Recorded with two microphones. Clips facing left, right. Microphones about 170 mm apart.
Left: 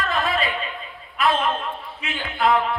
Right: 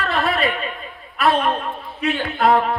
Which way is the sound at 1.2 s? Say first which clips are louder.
Right 3 dB; 35° right (ahead or behind).